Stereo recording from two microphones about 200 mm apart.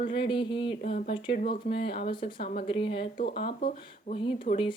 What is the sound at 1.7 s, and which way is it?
Speech, 55° left (ahead or behind).